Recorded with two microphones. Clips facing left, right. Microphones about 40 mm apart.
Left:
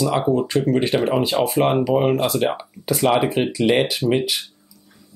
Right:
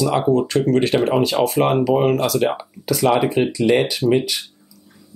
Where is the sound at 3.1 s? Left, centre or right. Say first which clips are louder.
Right 1 dB; centre.